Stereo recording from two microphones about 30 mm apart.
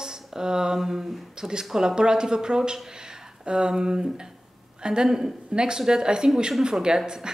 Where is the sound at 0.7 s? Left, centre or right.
Centre.